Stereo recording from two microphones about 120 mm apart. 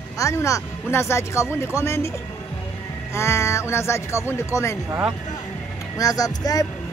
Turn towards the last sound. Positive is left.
turn(degrees=30)  # may be behind; listen again after turning